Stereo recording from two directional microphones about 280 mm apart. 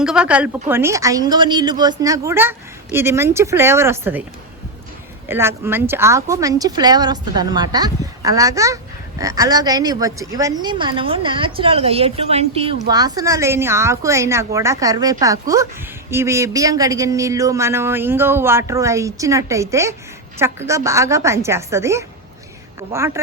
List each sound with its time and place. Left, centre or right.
0.0 s speech: centre
5.3 s speech: centre